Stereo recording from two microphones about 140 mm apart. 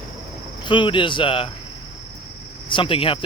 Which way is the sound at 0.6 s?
35° left (ahead or behind).